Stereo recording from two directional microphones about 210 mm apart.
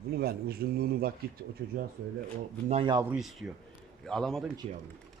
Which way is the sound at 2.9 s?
15° right (ahead or behind).